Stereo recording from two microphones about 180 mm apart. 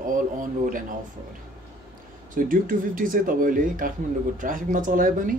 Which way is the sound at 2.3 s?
50° right (ahead or behind).